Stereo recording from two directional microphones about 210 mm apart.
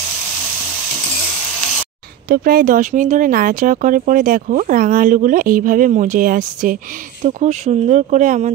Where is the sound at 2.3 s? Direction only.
45° right (ahead or behind).